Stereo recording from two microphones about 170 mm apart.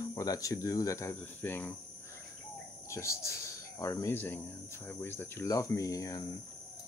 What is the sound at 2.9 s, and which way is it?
Speech, 15° left (ahead or behind).